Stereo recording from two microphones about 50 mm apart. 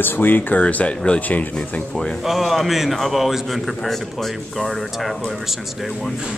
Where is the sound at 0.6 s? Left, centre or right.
Left.